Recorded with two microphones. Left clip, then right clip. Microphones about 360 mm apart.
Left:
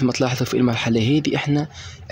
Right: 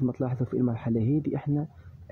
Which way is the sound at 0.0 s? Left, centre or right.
Right.